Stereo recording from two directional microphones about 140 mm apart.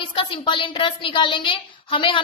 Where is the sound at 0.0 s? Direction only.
35° left (ahead or behind).